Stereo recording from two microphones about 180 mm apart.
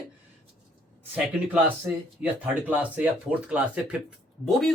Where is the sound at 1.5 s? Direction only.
5° right (ahead or behind).